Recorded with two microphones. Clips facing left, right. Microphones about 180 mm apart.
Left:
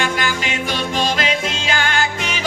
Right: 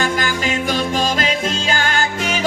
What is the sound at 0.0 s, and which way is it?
Music, 40° right (ahead or behind).